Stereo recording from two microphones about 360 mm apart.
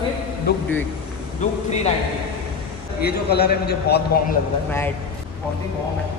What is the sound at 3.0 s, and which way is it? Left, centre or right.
A man's voice, left.